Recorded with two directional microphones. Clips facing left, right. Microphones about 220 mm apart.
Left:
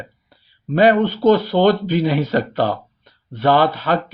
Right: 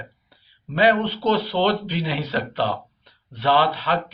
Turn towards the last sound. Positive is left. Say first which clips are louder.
# left 4 dB
turn(degrees=45)  # may be behind; listen again after turning